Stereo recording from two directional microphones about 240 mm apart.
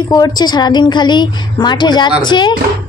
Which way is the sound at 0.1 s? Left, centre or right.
Centre.